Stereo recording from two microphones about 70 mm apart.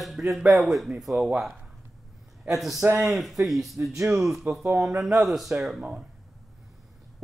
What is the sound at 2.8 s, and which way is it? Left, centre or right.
Speech, right.